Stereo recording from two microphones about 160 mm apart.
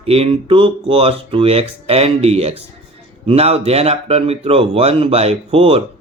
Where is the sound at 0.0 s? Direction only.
35° right (ahead or behind).